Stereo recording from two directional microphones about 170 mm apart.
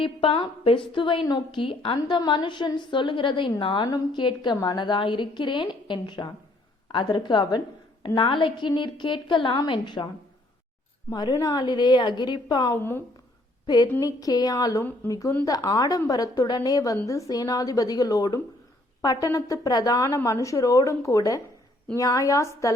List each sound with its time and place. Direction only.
0.0 s a woman's voice: 30° left (ahead or behind)
11.1 s a woman's voice: 25° left (ahead or behind)
12.7 s a woman's voice: 15° left (ahead or behind)
14.0 s a woman's voice: 20° left (ahead or behind)